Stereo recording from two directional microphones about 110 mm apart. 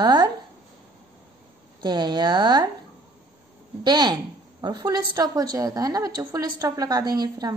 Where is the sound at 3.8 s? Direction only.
40° right (ahead or behind).